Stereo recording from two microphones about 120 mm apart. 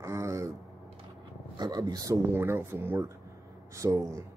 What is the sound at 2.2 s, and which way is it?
Speech, 20° right (ahead or behind).